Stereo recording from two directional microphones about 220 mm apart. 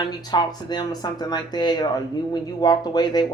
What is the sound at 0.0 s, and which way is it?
Speech, 20° left (ahead or behind).